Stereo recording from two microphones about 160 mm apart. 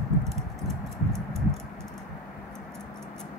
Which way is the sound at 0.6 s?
20° right (ahead or behind).